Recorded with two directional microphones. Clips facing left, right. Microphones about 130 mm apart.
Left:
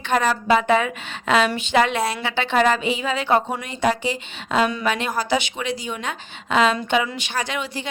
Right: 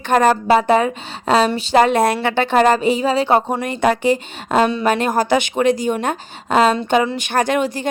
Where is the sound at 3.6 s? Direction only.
55° right (ahead or behind).